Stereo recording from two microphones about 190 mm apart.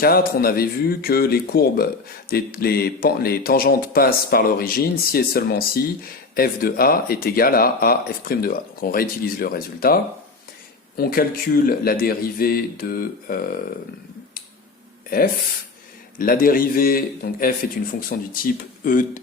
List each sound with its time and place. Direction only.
0.0 s speech: 50° left (ahead or behind)
16.1 s speech: 50° left (ahead or behind)